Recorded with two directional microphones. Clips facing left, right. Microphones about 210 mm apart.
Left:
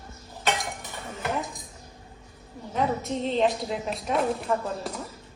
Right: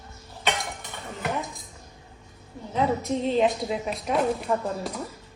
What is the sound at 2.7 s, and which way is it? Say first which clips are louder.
A woman's voice: right 2 dB; centre (ahead or behind).